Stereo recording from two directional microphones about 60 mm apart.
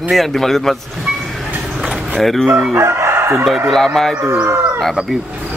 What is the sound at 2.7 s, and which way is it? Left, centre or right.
Crowing, right.